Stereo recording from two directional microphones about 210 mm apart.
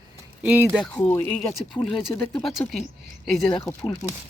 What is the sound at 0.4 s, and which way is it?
Speech, 10° right (ahead or behind).